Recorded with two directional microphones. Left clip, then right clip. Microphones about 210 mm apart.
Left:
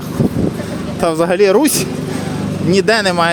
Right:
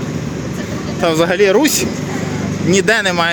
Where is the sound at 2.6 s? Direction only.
10° left (ahead or behind).